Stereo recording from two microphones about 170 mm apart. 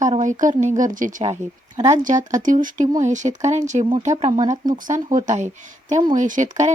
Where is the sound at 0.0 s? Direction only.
45° right (ahead or behind).